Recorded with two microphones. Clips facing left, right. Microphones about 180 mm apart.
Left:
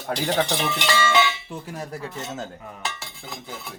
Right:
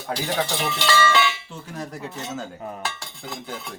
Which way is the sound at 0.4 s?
20° left (ahead or behind).